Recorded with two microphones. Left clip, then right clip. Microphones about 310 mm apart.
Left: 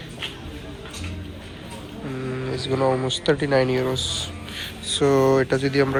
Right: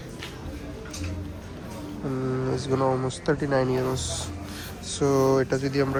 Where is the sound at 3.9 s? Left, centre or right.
Right.